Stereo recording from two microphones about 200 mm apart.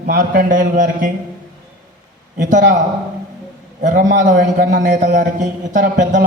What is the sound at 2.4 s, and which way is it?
Speech, 40° right (ahead or behind).